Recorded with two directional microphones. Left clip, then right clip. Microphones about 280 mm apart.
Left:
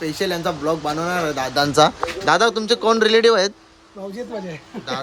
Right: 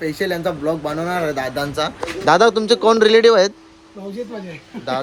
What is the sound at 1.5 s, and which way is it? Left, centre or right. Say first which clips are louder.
Speech: left 6 dB; left.